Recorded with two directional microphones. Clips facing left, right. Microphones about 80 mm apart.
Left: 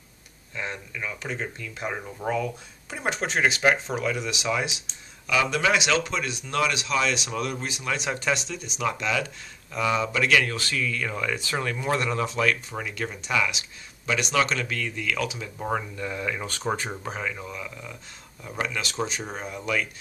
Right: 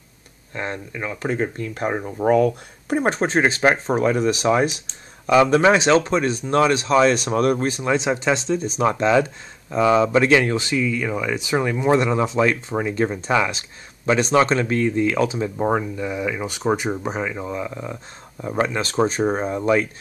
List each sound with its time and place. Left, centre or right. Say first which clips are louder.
0.6 s speech: right 5 dB; right
2.3 s speech: right 11 dB; right
7.8 s speech: right 4 dB; right
15.7 s speech: right 6 dB; centre; by 19.9 s right